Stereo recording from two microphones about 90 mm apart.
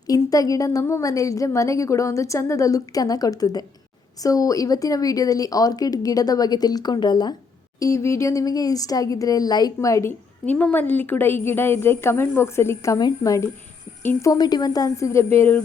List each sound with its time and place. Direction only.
0.1 s a woman's voice: 40° left (ahead or behind)
7.8 s a woman's voice: 35° left (ahead or behind)
10.4 s a woman's voice: 20° left (ahead or behind)
13.0 s a woman's voice: 45° left (ahead or behind)
14.3 s a woman's voice: 50° left (ahead or behind); by 15.6 s 25° left (ahead or behind)